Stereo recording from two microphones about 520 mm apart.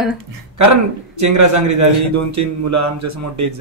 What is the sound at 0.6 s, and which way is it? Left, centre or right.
A man's voice, right.